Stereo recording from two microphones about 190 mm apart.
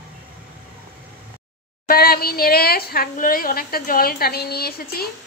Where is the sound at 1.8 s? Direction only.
55° left (ahead or behind).